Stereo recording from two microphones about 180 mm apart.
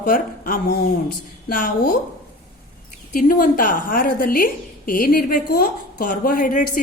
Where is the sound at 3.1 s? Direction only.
50° left (ahead or behind).